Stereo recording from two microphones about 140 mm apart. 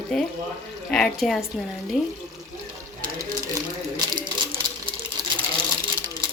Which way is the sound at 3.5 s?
30° right (ahead or behind).